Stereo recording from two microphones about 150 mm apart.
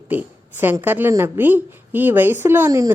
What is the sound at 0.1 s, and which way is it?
A woman's voice, 10° right (ahead or behind).